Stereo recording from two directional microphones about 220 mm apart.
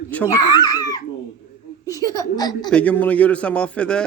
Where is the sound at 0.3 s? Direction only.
20° left (ahead or behind).